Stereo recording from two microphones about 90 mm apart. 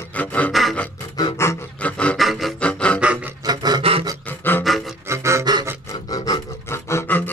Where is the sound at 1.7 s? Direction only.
15° left (ahead or behind).